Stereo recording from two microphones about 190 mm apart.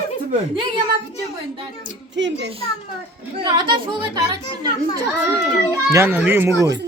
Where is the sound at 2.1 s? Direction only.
70° right (ahead or behind).